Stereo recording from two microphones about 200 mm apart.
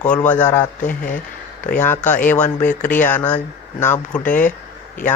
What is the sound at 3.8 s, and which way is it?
Speech, 10° left (ahead or behind).